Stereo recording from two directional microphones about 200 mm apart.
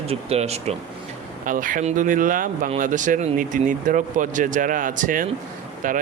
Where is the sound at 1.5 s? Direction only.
40° right (ahead or behind).